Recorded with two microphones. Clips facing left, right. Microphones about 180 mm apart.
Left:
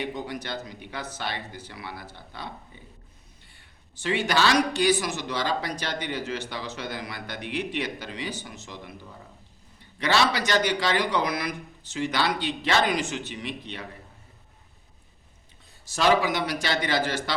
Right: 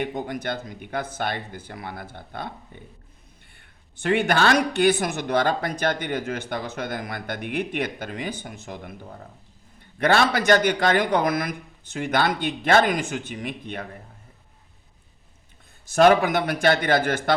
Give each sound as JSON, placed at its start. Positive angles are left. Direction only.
{"t": 0.0, "sound": "speech", "side_deg": -50}
{"t": 3.9, "sound": "speech", "side_deg": -55}
{"t": 15.9, "sound": "a man's voice", "side_deg": -55}